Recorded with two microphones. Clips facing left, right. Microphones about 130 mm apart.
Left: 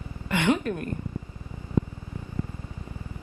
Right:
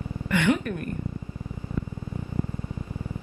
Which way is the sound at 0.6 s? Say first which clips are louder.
Left 1 dB; 25° left (ahead or behind).